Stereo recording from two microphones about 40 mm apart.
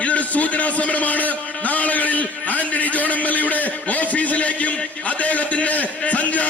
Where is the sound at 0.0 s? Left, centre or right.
Left.